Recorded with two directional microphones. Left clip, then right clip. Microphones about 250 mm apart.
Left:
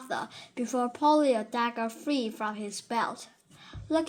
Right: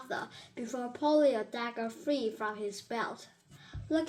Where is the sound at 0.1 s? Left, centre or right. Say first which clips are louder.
Left 4 dB; left.